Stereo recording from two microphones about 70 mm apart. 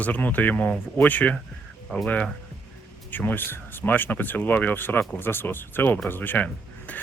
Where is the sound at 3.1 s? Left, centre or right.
Left.